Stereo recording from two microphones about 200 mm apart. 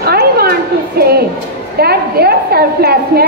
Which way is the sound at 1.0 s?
50° right (ahead or behind).